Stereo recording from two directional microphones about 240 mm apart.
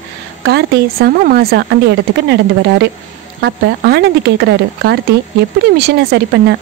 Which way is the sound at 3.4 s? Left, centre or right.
Right.